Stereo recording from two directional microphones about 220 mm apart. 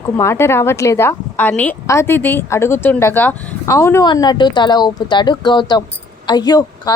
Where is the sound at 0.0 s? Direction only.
10° left (ahead or behind).